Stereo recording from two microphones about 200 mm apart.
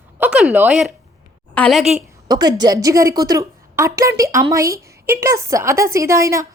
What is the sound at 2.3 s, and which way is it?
A woman's voice, 20° right (ahead or behind).